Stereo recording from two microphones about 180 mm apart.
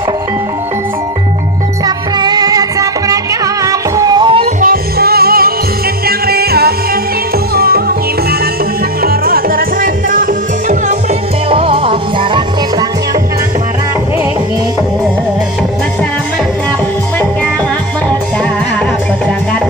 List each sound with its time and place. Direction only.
1.9 s music: 20° right (ahead or behind)
4.6 s music: 55° right (ahead or behind)
9.0 s music: 55° right (ahead or behind)
11.5 s music: 30° right (ahead or behind)